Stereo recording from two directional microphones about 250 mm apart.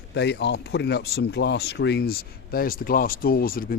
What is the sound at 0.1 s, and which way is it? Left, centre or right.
Speech, left.